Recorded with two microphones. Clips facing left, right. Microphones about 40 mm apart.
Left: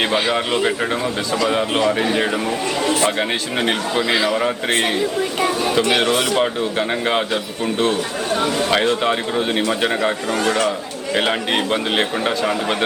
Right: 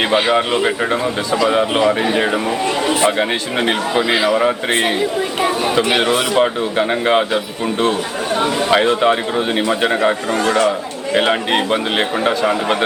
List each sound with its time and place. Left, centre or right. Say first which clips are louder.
0.0 s speech: right 4 dB; centre
3.1 s speech: right 3 dB; centre
5.4 s chatter: right 2 dB; right
5.9 s speech: right 2 dB; centre